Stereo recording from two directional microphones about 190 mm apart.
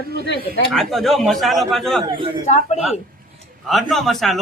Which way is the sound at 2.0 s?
25° right (ahead or behind).